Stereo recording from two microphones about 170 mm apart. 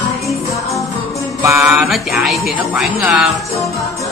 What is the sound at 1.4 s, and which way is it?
Speech, 15° right (ahead or behind).